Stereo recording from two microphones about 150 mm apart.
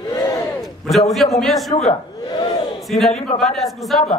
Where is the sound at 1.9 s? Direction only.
35° left (ahead or behind).